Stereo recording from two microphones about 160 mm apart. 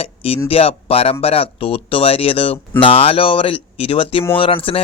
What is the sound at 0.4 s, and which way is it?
Speech, 40° left (ahead or behind).